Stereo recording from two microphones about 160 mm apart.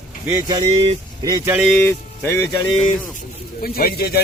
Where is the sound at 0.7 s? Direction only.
35° right (ahead or behind).